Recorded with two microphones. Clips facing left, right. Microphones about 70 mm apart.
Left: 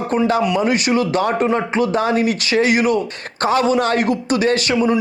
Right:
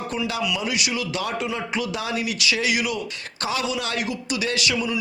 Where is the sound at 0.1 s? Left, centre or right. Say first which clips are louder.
Left 11 dB; left.